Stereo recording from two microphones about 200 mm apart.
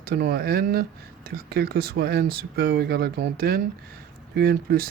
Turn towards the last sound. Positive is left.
turn(degrees=-50)  # may be behind; listen again after turning